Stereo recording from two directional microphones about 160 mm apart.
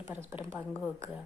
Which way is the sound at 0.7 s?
5° left (ahead or behind).